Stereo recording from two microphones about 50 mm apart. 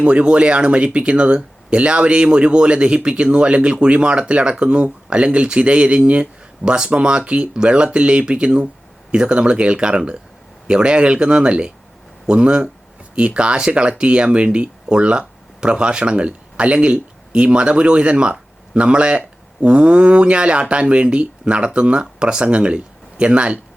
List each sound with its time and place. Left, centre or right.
0.0 s speech: right